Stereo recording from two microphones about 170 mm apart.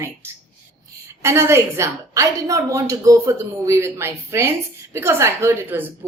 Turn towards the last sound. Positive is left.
turn(degrees=-10)  # may be behind; listen again after turning